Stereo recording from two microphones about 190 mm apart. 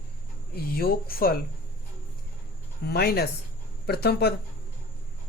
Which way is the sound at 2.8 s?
55° left (ahead or behind).